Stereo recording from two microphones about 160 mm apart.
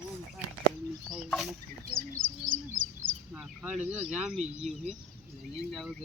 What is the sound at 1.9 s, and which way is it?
Speech, 60° right (ahead or behind).